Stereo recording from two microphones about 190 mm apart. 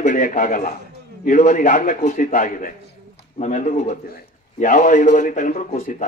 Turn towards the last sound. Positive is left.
turn(degrees=40)  # may be behind; listen again after turning